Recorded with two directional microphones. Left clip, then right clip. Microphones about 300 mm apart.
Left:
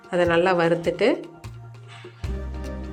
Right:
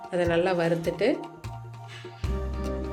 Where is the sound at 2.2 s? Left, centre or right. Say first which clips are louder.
Right 3 dB; centre.